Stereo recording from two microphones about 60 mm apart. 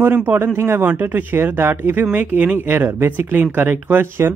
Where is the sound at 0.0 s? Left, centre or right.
Right.